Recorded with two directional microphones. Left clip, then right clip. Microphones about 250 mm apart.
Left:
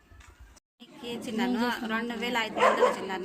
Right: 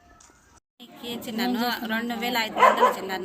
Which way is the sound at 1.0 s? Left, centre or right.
Centre.